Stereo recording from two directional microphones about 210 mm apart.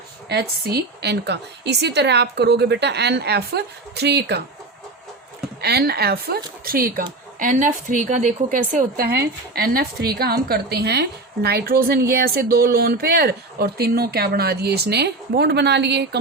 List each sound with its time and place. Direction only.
0.3 s speech: 50° right (ahead or behind)
5.6 s speech: 50° right (ahead or behind)